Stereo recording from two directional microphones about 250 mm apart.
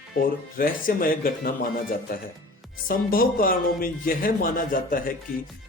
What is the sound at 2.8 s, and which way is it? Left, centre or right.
Speech, left.